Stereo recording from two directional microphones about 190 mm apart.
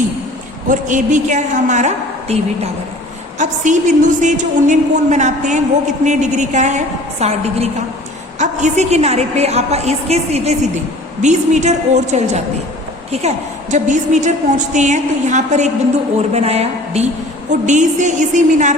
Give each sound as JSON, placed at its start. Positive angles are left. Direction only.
{"t": 0.7, "sound": "a woman's voice", "side_deg": -40}